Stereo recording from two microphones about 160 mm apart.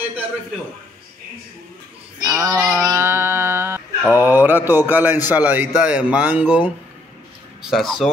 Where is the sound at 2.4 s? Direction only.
20° right (ahead or behind).